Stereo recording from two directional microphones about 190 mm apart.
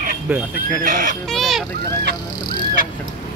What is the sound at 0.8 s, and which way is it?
Speech, 45° right (ahead or behind).